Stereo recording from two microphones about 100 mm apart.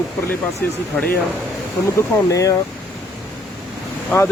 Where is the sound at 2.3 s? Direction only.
35° left (ahead or behind).